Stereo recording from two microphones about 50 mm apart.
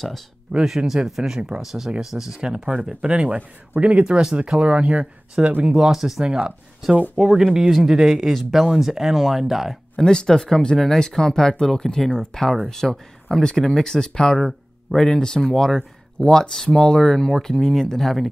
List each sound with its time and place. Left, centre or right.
0.7 s speech: centre
4.6 s speech: right
5.6 s speech: centre
6.2 s speech: centre
9.9 s speech: centre
14.4 s a sound: centre
15.0 s speech: centre